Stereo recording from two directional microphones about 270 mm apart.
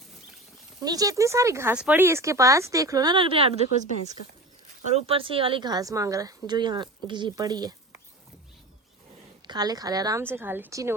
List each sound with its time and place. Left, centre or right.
0.8 s speech: centre
4.9 s speech: right
9.5 s speech: centre